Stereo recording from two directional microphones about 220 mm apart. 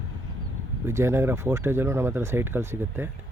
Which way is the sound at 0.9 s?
10° right (ahead or behind).